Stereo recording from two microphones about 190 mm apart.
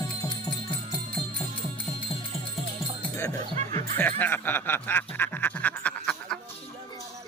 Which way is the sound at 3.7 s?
40° right (ahead or behind).